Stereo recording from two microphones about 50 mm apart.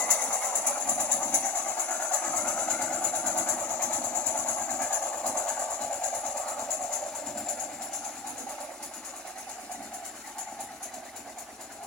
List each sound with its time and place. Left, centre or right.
0.0 s train: left